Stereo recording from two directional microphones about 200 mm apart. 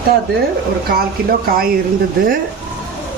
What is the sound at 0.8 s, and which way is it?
Speech, 50° right (ahead or behind).